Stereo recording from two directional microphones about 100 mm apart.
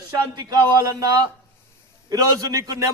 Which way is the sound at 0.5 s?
35° right (ahead or behind).